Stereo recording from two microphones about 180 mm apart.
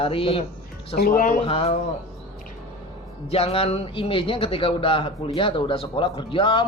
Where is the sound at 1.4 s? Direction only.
35° left (ahead or behind).